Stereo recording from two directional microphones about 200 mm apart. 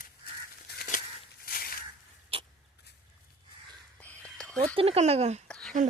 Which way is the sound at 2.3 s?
30° right (ahead or behind).